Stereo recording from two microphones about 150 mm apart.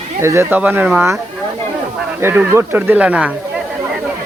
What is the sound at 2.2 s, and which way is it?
Speech, 15° right (ahead or behind).